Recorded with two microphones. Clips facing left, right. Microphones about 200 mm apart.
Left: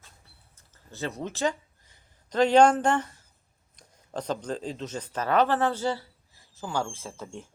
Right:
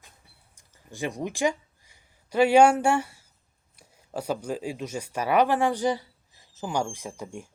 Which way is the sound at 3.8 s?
10° right (ahead or behind).